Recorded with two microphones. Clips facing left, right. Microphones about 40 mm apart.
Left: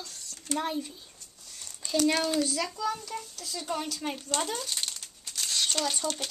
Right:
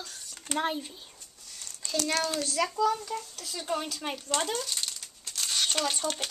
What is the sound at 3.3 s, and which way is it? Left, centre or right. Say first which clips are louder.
Speech: even; centre.